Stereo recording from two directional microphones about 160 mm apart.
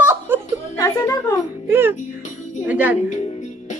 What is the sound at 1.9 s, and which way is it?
Music, 50° left (ahead or behind).